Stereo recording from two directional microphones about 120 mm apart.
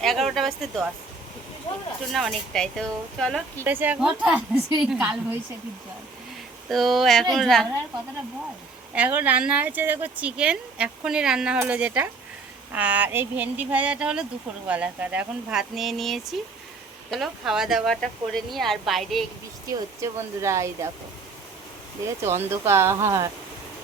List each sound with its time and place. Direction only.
0.0 s speech: centre (ahead or behind)
2.1 s speech: 5° left (ahead or behind)
3.6 s speech: 15° right (ahead or behind)
6.7 s speech: centre (ahead or behind)
9.0 s speech: 15° right (ahead or behind)
19.6 s speech: 25° right (ahead or behind)
22.0 s speech: 20° right (ahead or behind)